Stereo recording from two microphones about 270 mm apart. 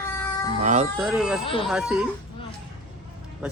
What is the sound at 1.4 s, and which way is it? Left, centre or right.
Speech, centre.